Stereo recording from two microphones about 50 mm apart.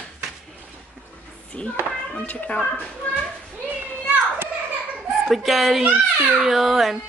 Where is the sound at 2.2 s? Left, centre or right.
Left.